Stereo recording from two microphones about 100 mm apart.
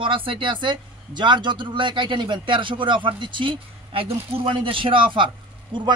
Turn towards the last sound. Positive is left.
turn(degrees=-55)  # may be behind; listen again after turning